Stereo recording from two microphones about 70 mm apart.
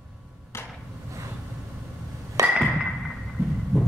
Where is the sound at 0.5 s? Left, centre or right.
Left.